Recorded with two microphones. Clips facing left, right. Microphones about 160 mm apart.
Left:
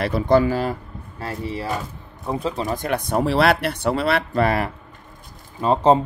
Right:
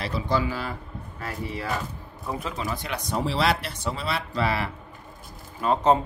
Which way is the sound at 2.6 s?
45° left (ahead or behind).